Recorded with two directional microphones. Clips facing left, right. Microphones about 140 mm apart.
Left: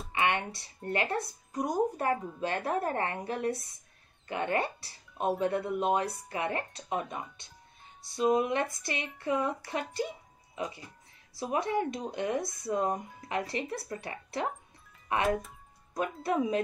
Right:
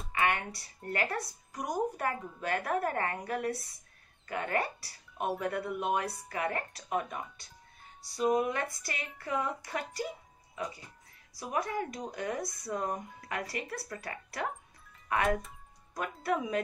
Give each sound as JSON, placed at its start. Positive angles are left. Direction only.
{"t": 0.1, "sound": "speech", "side_deg": 25}
{"t": 10.6, "sound": "speech", "side_deg": 25}